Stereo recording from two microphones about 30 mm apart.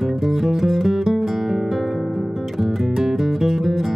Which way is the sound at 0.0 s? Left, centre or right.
Centre.